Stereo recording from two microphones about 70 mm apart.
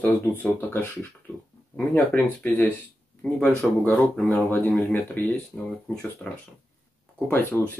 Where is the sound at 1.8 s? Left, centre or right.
Left.